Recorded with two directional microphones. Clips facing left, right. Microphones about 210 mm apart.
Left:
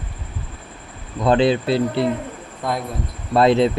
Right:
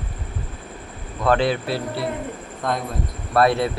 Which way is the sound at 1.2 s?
20° left (ahead or behind).